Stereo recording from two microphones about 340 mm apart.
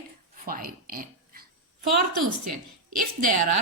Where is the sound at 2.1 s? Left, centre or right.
Right.